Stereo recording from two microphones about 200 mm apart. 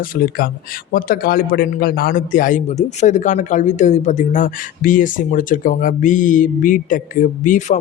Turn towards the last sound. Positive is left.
turn(degrees=40)  # may be behind; listen again after turning